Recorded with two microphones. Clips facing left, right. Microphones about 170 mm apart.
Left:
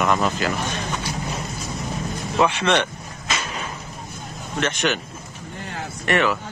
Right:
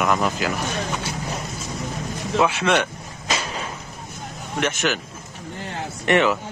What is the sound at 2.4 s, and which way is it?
Speech, 5° right (ahead or behind).